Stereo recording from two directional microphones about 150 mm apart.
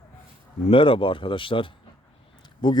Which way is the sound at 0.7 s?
35° left (ahead or behind).